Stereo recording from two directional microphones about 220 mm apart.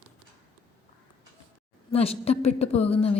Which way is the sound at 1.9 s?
25° left (ahead or behind).